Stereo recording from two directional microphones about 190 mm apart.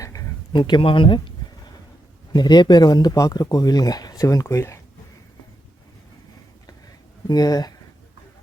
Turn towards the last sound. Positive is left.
turn(degrees=20)  # may be behind; listen again after turning